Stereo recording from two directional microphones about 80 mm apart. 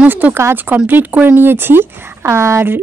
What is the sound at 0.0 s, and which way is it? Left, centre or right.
Speech, right.